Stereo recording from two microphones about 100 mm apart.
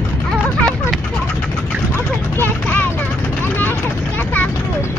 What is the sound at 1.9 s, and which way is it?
Vehicle, 20° left (ahead or behind).